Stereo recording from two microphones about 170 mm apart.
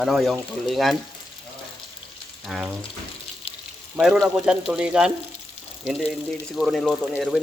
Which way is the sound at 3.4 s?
35° left (ahead or behind).